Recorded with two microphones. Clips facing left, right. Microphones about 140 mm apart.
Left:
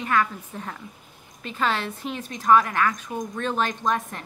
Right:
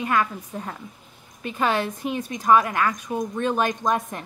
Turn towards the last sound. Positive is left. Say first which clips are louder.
# right 2 dB
turn(degrees=-15)  # may be behind; listen again after turning